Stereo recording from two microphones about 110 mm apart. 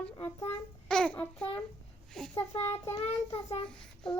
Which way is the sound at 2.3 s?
20° left (ahead or behind).